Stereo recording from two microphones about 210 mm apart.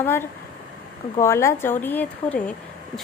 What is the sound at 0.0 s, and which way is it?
Speech, 10° left (ahead or behind).